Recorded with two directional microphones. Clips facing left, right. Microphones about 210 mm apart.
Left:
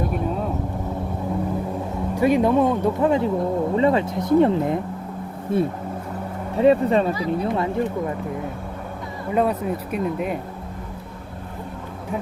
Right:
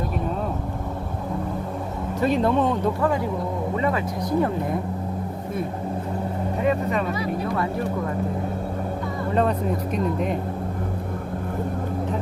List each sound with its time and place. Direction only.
2.1 s speech: 10° left (ahead or behind)
3.8 s speech: 25° left (ahead or behind)
6.6 s speech: 30° left (ahead or behind)
9.3 s speech: 10° left (ahead or behind)